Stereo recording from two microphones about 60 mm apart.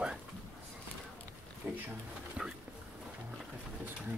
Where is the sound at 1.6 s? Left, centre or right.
Right.